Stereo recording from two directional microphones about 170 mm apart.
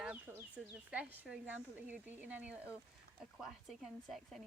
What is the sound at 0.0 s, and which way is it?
A woman's voice, 10° right (ahead or behind).